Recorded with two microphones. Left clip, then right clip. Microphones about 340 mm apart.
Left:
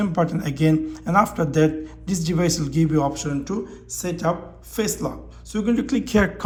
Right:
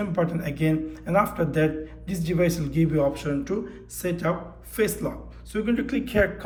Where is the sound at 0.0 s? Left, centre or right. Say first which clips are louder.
Left 3 dB; centre.